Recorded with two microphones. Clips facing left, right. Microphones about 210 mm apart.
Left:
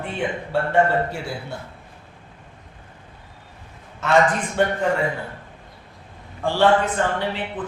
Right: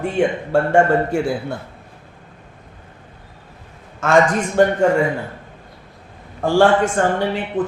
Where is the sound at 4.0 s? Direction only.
45° right (ahead or behind).